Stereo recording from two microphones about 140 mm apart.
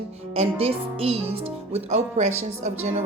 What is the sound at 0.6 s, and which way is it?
Speech, 45° right (ahead or behind).